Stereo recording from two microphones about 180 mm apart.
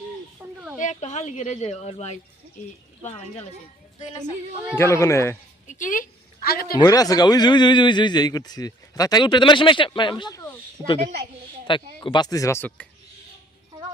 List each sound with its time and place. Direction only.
0.8 s speech: 40° left (ahead or behind)
4.7 s speech: 15° left (ahead or behind)
5.6 s a woman's voice: 45° left (ahead or behind)
6.7 s a man's voice: 20° left (ahead or behind)